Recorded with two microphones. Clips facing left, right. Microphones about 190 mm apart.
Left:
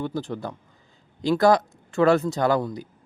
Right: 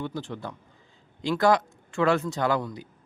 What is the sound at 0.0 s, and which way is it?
A man's voice, 40° left (ahead or behind).